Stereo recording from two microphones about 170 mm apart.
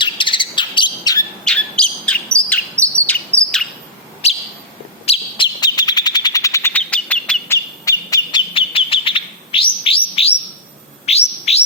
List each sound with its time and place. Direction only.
0.0 s chirp: 30° left (ahead or behind)
1.5 s chirp: 5° left (ahead or behind)
4.2 s bird: 40° left (ahead or behind); by 8.4 s 20° left (ahead or behind)
8.5 s chirp: 30° left (ahead or behind)
11.0 s bird: 40° left (ahead or behind)